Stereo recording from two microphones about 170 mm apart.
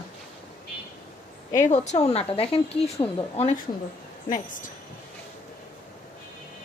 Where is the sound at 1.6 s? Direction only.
45° left (ahead or behind).